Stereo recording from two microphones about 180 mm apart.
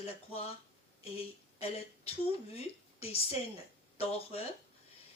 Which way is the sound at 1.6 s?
35° left (ahead or behind).